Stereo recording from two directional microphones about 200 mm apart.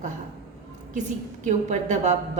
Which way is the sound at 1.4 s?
40° right (ahead or behind).